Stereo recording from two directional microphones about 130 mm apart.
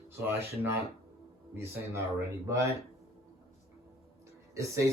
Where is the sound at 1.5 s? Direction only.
20° right (ahead or behind).